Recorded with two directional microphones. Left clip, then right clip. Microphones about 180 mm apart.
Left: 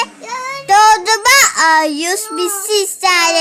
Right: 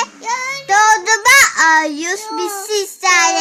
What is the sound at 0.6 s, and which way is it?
Child singing, 15° left (ahead or behind).